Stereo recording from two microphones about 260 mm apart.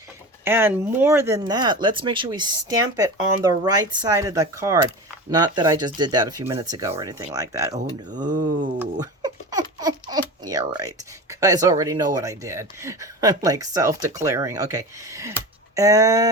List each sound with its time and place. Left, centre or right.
0.4 s speech: centre
7.8 s speech: right
8.8 s speech: centre